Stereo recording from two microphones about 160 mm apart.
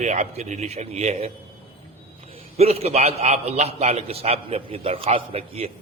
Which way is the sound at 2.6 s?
40° right (ahead or behind).